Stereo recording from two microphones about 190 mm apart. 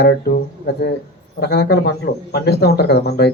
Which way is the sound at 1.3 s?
60° left (ahead or behind).